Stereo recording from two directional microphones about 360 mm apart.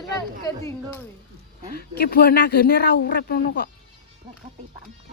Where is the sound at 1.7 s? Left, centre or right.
Left.